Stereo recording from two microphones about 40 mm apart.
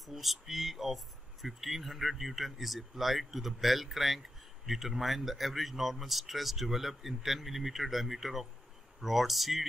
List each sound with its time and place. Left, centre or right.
0.0 s speech: centre